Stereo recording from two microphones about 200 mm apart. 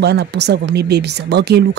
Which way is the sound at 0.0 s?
55° right (ahead or behind).